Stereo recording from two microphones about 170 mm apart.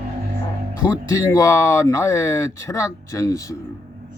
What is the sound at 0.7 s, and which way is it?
Speech, 20° left (ahead or behind).